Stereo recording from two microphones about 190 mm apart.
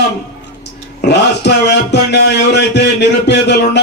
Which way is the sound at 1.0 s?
60° left (ahead or behind).